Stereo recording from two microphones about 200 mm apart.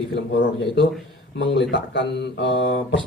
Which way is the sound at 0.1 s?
55° left (ahead or behind).